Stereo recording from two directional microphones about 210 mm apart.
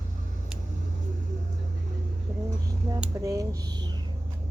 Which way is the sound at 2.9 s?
15° right (ahead or behind).